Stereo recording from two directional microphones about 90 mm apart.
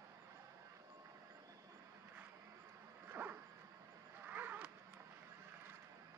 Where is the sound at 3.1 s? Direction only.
20° right (ahead or behind).